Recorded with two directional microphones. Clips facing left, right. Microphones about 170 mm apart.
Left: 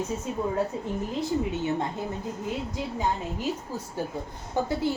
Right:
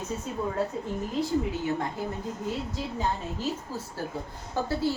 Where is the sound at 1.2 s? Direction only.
25° left (ahead or behind).